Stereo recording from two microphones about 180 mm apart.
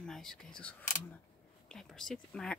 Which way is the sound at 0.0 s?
5° left (ahead or behind).